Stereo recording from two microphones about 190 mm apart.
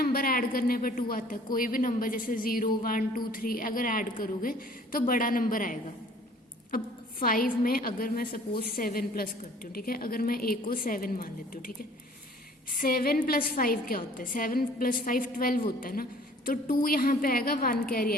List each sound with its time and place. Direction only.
0.0 s a woman's voice: 50° left (ahead or behind)
12.7 s a woman's voice: 50° left (ahead or behind)